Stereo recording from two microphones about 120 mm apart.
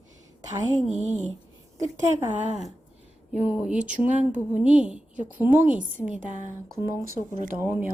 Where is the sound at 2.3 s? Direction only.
70° right (ahead or behind).